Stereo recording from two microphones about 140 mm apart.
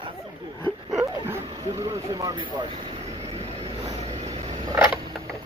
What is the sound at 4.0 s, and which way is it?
Vehicle, 45° right (ahead or behind).